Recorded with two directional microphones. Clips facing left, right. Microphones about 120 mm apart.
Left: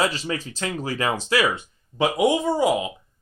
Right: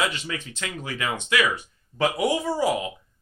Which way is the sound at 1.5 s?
20° left (ahead or behind).